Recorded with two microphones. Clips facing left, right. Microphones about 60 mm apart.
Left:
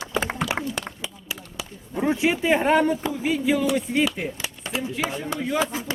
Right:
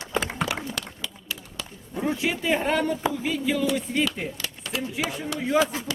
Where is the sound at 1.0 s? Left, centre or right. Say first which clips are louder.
Left 1 dB; centre.